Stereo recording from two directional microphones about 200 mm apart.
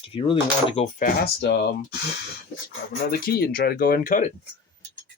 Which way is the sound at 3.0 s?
45° left (ahead or behind).